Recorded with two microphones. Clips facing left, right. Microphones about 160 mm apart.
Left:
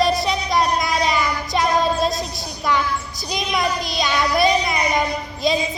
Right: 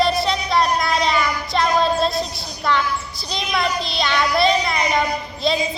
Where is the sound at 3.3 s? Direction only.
15° left (ahead or behind).